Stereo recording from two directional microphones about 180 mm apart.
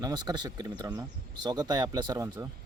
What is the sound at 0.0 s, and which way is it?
Speech, 20° right (ahead or behind).